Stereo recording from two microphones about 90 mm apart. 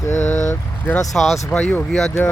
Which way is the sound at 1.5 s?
15° left (ahead or behind).